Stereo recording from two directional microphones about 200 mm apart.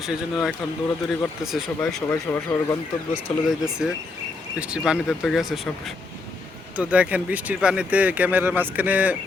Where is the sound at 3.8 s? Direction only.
5° right (ahead or behind).